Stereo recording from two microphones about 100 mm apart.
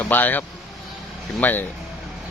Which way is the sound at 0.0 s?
20° left (ahead or behind).